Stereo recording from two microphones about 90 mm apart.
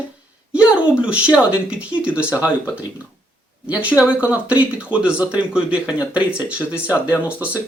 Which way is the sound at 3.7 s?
15° right (ahead or behind).